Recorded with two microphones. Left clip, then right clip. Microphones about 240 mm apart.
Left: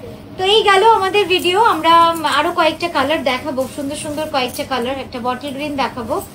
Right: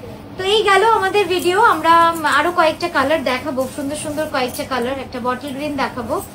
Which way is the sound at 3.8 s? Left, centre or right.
Left.